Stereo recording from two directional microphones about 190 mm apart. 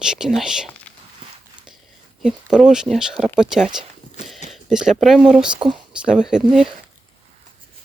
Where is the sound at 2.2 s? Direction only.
Centre (ahead or behind).